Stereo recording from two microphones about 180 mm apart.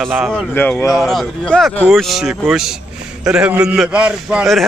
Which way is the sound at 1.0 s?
5° left (ahead or behind).